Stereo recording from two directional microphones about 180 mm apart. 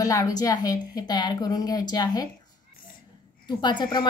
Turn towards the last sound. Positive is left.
turn(degrees=25)  # may be behind; listen again after turning